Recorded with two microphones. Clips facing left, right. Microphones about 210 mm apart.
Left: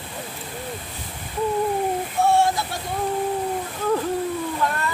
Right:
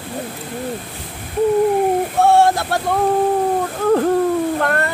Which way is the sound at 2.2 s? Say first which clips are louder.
Right 5 dB; 70° right (ahead or behind).